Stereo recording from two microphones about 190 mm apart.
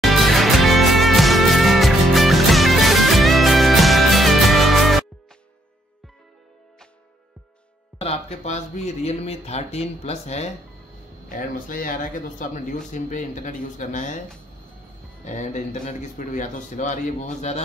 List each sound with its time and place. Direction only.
0.0 s music: centre (ahead or behind)
8.0 s speech: 35° left (ahead or behind)
11.2 s speech: 45° left (ahead or behind)
15.2 s speech: 40° left (ahead or behind)